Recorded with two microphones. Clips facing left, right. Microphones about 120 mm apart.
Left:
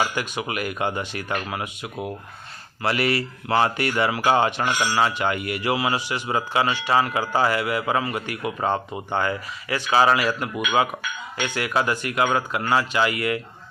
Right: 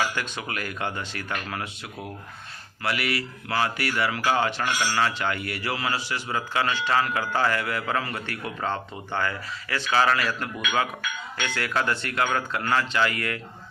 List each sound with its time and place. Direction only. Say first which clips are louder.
0.2 s speech: left 5 dB; 15° left (ahead or behind)
2.8 s speech: left 5 dB; 30° left (ahead or behind); by 13.4 s 10° left (ahead or behind)